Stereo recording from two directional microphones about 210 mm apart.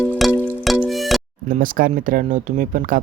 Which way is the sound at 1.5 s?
40° right (ahead or behind).